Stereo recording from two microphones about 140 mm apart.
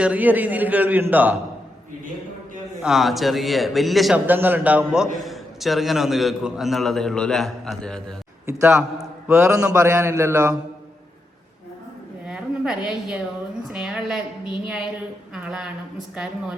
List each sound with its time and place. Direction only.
0.0 s a man's voice: 10° right (ahead or behind)
2.8 s a man's voice: centre (ahead or behind)
4.3 s a man's voice: 15° right (ahead or behind); by 8.1 s 5° left (ahead or behind)
8.6 s a man's voice: 5° right (ahead or behind)
9.3 s speech: 20° right (ahead or behind)
12.3 s a woman's voice: 5° right (ahead or behind)
15.4 s a man's voice: 5° right (ahead or behind)